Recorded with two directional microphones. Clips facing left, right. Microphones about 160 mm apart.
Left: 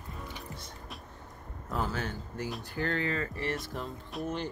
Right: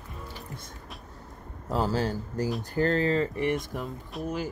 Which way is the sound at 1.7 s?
30° right (ahead or behind).